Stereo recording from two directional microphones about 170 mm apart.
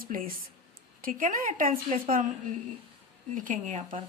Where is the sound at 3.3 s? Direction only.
50° right (ahead or behind).